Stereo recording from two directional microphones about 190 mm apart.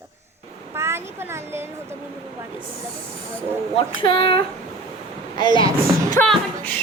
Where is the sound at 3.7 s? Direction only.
25° left (ahead or behind).